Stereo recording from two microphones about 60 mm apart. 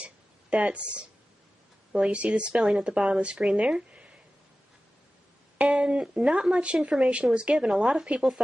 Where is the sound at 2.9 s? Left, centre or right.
Centre.